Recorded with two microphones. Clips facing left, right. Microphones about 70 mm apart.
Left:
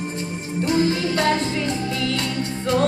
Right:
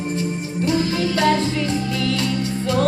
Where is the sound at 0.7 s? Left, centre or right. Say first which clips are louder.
Left 1 dB; left.